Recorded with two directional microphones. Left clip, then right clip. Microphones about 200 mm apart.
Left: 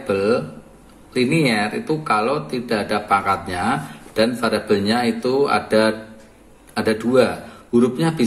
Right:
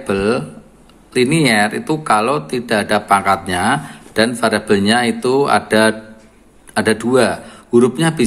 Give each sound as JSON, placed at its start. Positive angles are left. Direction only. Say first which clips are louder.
{"t": 0.0, "sound": "a man's voice", "louder": "right 2 dB", "side_deg": -35}